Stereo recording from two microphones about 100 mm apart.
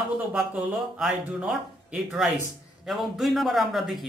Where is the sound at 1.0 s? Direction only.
5° right (ahead or behind).